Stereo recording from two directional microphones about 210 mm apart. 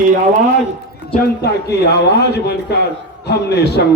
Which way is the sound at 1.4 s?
50° left (ahead or behind).